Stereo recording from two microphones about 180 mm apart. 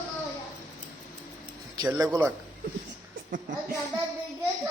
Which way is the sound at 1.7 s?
20° right (ahead or behind).